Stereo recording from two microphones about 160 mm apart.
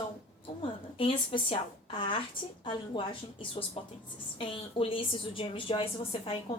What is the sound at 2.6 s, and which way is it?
A woman's voice, 30° left (ahead or behind).